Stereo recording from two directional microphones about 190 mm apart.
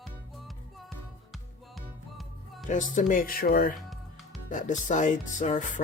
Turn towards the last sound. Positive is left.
turn(degrees=40)  # may be behind; listen again after turning